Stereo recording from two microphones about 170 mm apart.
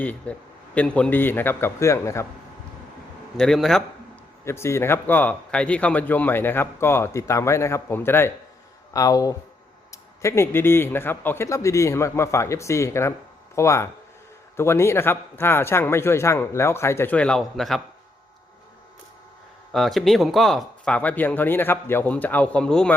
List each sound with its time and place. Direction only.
0.0 s speech: 10° left (ahead or behind)
3.3 s a man's voice: centre (ahead or behind)
4.4 s speech: 15° left (ahead or behind)
19.7 s speech: centre (ahead or behind)